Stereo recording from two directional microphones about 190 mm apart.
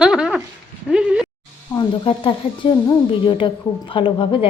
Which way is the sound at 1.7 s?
25° left (ahead or behind).